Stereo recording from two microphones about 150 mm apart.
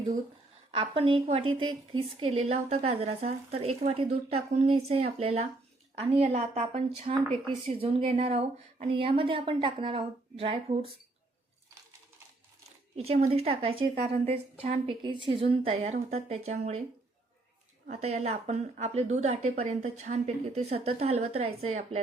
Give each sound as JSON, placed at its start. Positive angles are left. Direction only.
{"t": 0.7, "sound": "a woman's voice", "side_deg": -35}
{"t": 12.6, "sound": "a woman's voice", "side_deg": -45}
{"t": 15.0, "sound": "a woman's voice", "side_deg": -35}
{"t": 17.9, "sound": "a woman's voice", "side_deg": -45}